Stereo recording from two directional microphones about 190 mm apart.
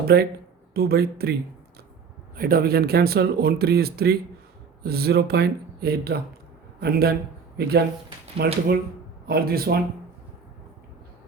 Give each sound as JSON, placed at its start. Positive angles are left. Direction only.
{"t": 0.1, "sound": "a man's voice", "side_deg": -55}